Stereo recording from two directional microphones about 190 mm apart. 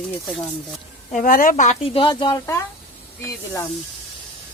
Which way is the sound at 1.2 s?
45° left (ahead or behind).